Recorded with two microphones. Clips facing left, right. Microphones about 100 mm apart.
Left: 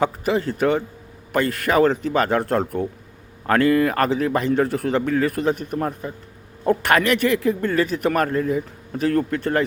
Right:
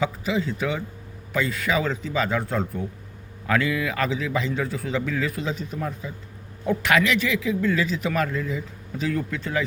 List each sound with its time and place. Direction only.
0.0 s a man's voice: 60° left (ahead or behind)
3.4 s a man's voice: 50° left (ahead or behind)